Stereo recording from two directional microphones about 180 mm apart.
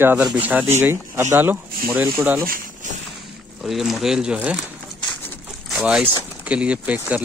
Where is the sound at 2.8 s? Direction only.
45° right (ahead or behind).